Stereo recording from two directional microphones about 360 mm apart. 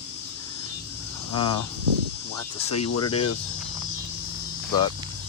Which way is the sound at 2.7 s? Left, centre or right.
Left.